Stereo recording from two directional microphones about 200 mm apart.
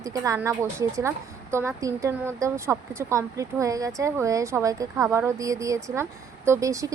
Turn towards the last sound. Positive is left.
turn(degrees=-15)  # may be behind; listen again after turning